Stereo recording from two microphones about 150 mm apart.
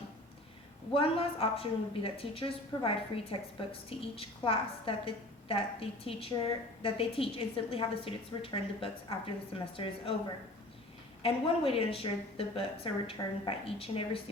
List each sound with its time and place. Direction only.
0.9 s a woman's voice: 40° left (ahead or behind)
11.2 s a woman's voice: 40° left (ahead or behind)